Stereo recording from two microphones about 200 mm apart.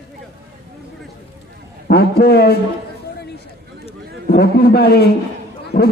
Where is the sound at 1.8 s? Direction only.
50° left (ahead or behind).